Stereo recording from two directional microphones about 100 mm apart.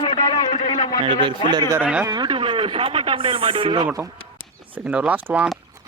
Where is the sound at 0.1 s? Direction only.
55° left (ahead or behind).